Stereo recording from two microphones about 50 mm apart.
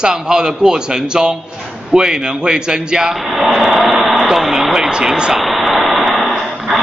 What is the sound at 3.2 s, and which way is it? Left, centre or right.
Speech, centre.